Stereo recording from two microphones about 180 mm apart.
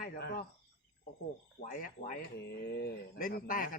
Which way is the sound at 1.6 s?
50° left (ahead or behind).